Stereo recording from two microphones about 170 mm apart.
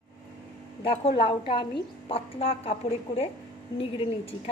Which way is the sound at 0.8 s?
30° left (ahead or behind).